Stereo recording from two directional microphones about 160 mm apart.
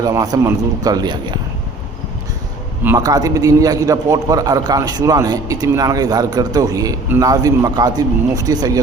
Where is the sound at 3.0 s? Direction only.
25° right (ahead or behind).